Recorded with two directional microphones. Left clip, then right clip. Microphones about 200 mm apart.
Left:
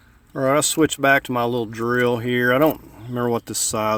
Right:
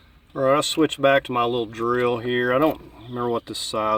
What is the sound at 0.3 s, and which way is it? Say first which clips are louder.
Speech: left 1 dB; 45° left (ahead or behind).